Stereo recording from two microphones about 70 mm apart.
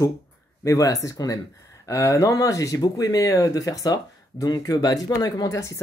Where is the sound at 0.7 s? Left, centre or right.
Left.